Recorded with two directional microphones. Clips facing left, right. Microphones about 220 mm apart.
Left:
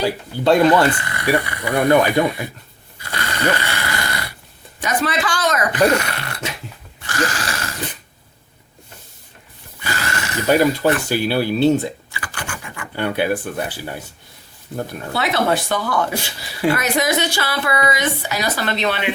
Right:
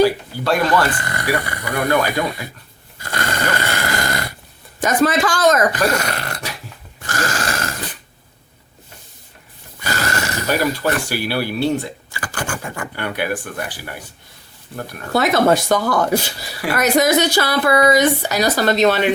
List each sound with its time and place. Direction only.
0.0 s speech: 20° left (ahead or behind)
0.9 s speech: 45° right (ahead or behind)
1.6 s speech: 20° left (ahead or behind)
3.0 s dog: 45° right (ahead or behind)
4.8 s speech: 45° right (ahead or behind)
7.0 s a sound: 45° right (ahead or behind)
9.8 s a sound: 40° right (ahead or behind)
10.4 s speech: 20° left (ahead or behind)
12.1 s scratch: 45° right (ahead or behind)
13.0 s speech: 20° left (ahead or behind)
15.1 s speech: 45° right (ahead or behind)